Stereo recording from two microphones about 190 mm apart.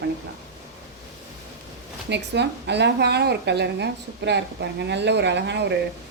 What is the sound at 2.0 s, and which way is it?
A woman's voice, 65° right (ahead or behind).